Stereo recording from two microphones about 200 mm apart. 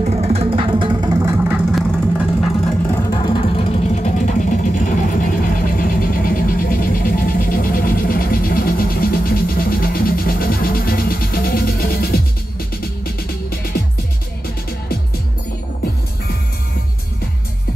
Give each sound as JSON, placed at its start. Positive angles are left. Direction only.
{"t": 0.0, "sound": "music", "side_deg": -30}
{"t": 1.7, "sound": "vehicle", "side_deg": 0}
{"t": 3.1, "sound": "vehicle", "side_deg": 25}